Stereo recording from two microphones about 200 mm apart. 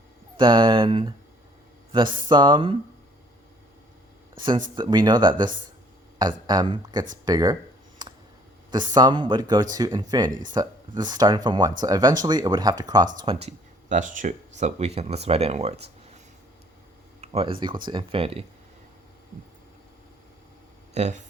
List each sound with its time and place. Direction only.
0.3 s speech: 25° right (ahead or behind)
2.3 s speech: 25° right (ahead or behind)
4.4 s speech: 25° right (ahead or behind)
8.0 s a sound: 20° right (ahead or behind)
8.7 s speech: 20° right (ahead or behind)
13.9 s speech: 40° right (ahead or behind)
17.2 s speech: 25° right (ahead or behind)
20.9 s speech: 35° right (ahead or behind)